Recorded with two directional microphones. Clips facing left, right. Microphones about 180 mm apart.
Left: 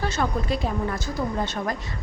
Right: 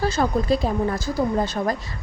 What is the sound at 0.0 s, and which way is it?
A woman's voice, 35° right (ahead or behind).